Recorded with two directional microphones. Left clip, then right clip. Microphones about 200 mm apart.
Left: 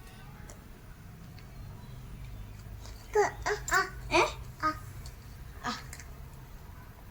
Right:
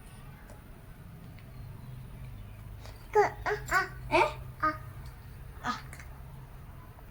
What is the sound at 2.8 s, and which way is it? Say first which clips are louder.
Babbling: right 2 dB; 15° right (ahead or behind).